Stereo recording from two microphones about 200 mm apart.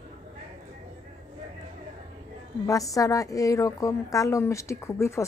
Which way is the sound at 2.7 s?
15° left (ahead or behind).